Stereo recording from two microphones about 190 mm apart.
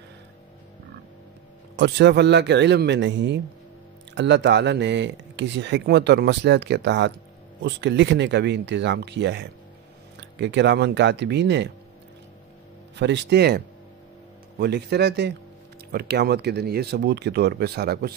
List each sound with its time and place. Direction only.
1.8 s speech: 65° right (ahead or behind)
12.9 s speech: 65° right (ahead or behind)
14.6 s speech: 60° right (ahead or behind)